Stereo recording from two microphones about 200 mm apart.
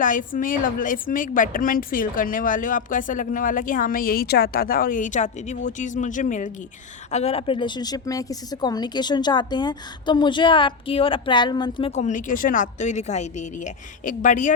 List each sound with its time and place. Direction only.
0.0 s a woman's voice: 40° left (ahead or behind); by 11.9 s 20° left (ahead or behind)
11.9 s a woman's voice: 35° left (ahead or behind)